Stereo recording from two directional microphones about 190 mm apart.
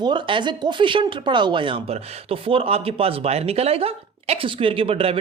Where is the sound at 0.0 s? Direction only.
25° right (ahead or behind).